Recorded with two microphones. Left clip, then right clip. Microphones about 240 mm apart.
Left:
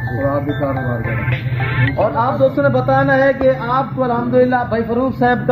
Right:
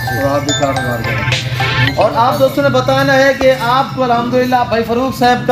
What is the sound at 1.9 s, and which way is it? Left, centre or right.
A man's voice, centre.